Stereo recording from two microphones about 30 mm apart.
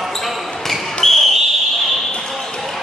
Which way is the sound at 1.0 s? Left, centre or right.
Centre.